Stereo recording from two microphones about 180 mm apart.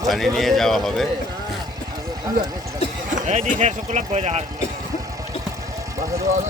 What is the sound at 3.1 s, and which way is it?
Speech, 40° right (ahead or behind).